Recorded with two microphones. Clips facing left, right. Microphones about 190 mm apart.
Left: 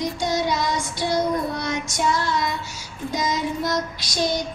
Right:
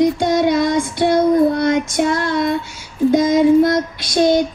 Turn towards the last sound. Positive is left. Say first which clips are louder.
# right 10 dB
turn(degrees=-55)  # may be behind; listen again after turning